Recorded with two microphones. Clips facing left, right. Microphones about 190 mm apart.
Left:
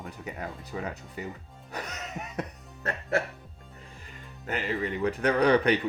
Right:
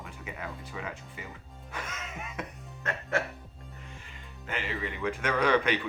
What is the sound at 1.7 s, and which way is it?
Music, 40° left (ahead or behind).